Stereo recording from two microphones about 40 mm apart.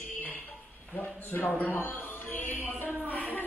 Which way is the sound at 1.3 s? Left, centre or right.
Left.